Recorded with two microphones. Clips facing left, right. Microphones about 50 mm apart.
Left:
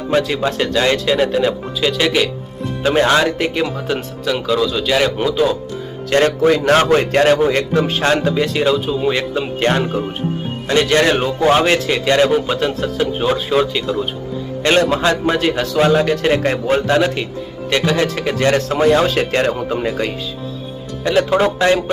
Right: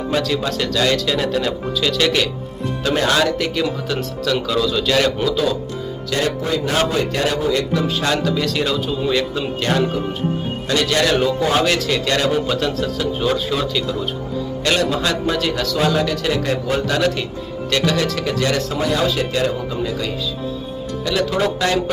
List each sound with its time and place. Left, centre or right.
0.1 s speech: left
2.8 s speech: left
6.1 s a man's voice: left